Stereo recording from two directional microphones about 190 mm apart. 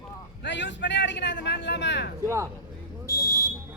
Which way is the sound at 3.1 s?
20° left (ahead or behind).